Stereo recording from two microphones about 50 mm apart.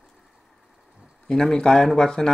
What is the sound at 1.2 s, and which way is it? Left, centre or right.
Speech, centre.